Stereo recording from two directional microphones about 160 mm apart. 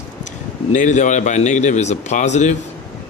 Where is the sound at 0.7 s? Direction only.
50° left (ahead or behind).